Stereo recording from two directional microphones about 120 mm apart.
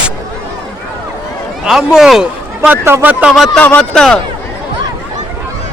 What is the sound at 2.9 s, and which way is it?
Speech, 20° right (ahead or behind).